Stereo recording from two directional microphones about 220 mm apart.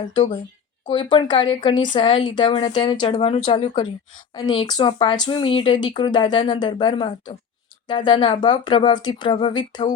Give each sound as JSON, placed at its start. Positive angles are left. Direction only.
{"t": 0.0, "sound": "speech", "side_deg": 20}
{"t": 4.4, "sound": "speech", "side_deg": 20}